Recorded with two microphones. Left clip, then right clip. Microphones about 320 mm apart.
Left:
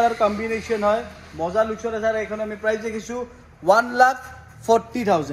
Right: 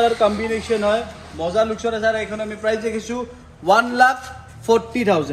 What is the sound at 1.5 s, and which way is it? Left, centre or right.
A man's voice, centre.